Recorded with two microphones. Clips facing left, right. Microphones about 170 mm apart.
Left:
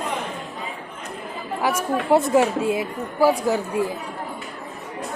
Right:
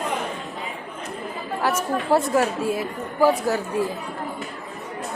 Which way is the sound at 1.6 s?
15° left (ahead or behind).